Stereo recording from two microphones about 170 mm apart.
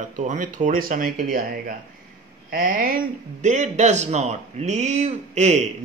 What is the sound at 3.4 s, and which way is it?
A man's voice, 45° right (ahead or behind).